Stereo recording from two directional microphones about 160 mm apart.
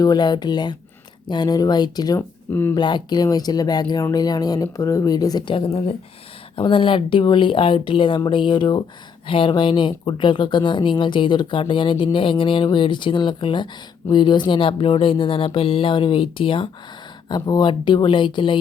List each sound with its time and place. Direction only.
0.0 s speech: 25° left (ahead or behind)
2.7 s speech: 30° left (ahead or behind)